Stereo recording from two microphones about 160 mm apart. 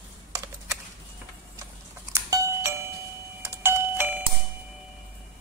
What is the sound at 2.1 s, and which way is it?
Doorbell, 20° right (ahead or behind).